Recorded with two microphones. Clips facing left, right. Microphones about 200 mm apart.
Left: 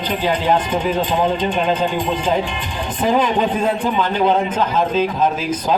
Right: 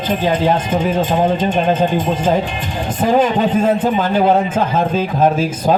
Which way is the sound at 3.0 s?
45° right (ahead or behind).